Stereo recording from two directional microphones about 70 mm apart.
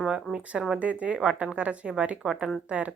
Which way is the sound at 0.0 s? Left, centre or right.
Centre.